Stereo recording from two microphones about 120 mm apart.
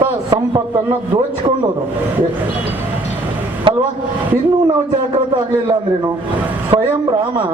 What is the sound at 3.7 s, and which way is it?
Speech, 45° right (ahead or behind).